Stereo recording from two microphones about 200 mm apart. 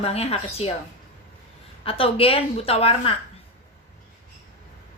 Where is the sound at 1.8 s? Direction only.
30° left (ahead or behind).